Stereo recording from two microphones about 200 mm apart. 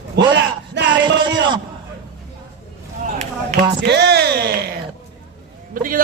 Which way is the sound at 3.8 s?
55° right (ahead or behind).